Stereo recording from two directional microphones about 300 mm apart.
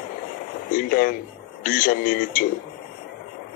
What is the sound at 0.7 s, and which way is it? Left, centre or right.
Speech, left.